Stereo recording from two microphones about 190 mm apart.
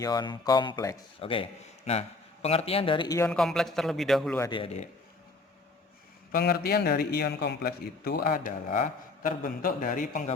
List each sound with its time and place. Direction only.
0.0 s a man's voice: 20° left (ahead or behind)
3.2 s speech: 5° left (ahead or behind)
4.4 s a man's voice: 20° left (ahead or behind)
6.3 s a man's voice: 50° left (ahead or behind)